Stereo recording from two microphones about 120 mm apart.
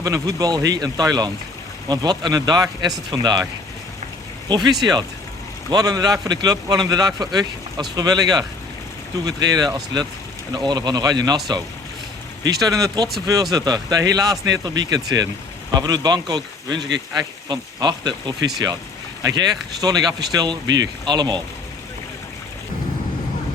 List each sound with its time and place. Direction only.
0.0 s speech: 30° right (ahead or behind)
4.4 s speech: 35° right (ahead or behind)
19.8 s speech: 30° right (ahead or behind)